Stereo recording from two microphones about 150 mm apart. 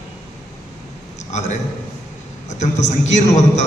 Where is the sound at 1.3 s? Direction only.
50° left (ahead or behind).